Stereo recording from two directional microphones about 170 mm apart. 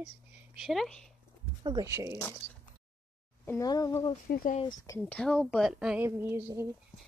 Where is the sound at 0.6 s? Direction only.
Centre (ahead or behind).